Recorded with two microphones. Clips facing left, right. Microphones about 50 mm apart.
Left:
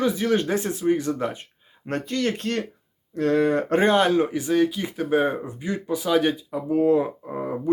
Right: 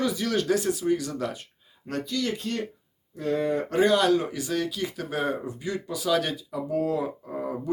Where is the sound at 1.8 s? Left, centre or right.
Left.